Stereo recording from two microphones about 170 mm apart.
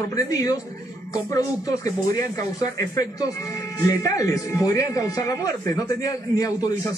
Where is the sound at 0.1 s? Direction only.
20° left (ahead or behind).